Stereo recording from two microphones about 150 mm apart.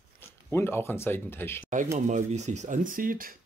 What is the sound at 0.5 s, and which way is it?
Speech, 15° left (ahead or behind).